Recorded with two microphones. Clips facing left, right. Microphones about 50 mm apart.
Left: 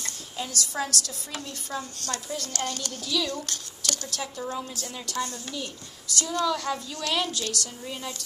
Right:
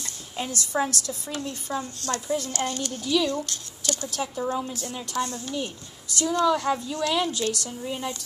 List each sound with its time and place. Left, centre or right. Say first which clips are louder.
0.4 s a woman's voice: right 4 dB; right
5.1 s a woman's voice: right 3 dB; right